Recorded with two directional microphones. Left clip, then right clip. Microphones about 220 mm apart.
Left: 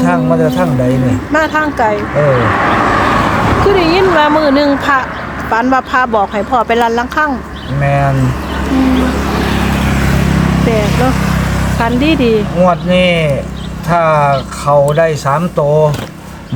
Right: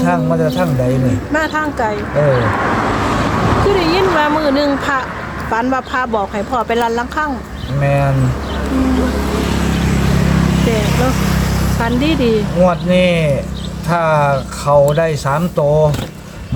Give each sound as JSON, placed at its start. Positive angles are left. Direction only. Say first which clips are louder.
{"t": 0.0, "sound": "speech", "louder": "left 3 dB", "side_deg": 5}
{"t": 2.1, "sound": "vehicle", "louder": "left 1 dB", "side_deg": 45}
{"t": 3.7, "sound": "speech", "louder": "left 4 dB", "side_deg": 10}
{"t": 7.8, "sound": "speech", "louder": "left 3 dB", "side_deg": 0}
{"t": 8.8, "sound": "music", "louder": "left 4 dB", "side_deg": 35}
{"t": 11.2, "sound": "vehicle", "louder": "left 3 dB", "side_deg": -35}
{"t": 11.8, "sound": "speech", "louder": "left 4 dB", "side_deg": 5}